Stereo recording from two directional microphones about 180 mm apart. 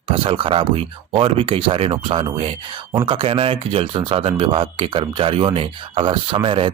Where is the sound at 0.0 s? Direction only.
30° right (ahead or behind).